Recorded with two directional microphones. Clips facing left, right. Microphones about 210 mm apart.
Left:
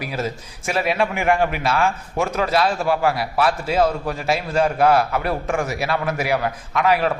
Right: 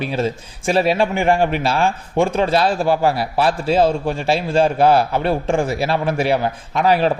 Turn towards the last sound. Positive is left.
turn(degrees=-30)  # may be behind; listen again after turning